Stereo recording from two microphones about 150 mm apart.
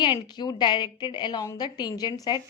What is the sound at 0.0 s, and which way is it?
A woman's voice, 30° left (ahead or behind).